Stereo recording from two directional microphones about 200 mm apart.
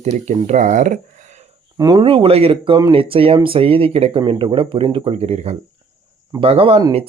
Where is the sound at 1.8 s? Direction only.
20° right (ahead or behind).